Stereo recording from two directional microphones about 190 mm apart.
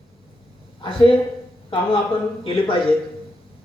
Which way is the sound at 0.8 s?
30° left (ahead or behind).